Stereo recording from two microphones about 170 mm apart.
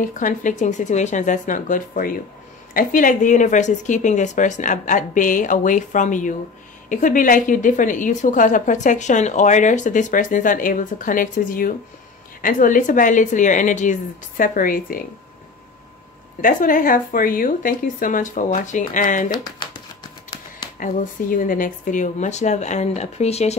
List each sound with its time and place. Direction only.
0.0 s a woman's voice: 50° left (ahead or behind)
16.3 s a woman's voice: 55° left (ahead or behind)
19.3 s speech: 25° left (ahead or behind)
20.8 s a woman's voice: 55° left (ahead or behind)